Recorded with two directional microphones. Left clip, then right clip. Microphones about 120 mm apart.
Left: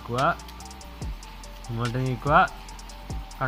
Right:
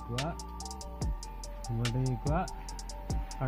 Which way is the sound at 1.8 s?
5° right (ahead or behind).